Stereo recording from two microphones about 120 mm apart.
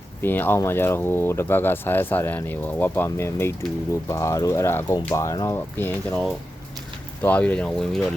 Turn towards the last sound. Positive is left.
turn(degrees=5)  # may be behind; listen again after turning